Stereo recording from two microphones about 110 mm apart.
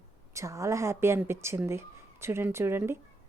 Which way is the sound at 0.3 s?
25° right (ahead or behind).